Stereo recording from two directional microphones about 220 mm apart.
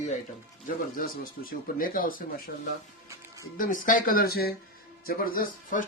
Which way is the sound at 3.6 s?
35° left (ahead or behind).